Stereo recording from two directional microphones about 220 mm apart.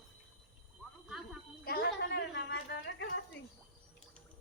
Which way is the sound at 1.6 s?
45° left (ahead or behind).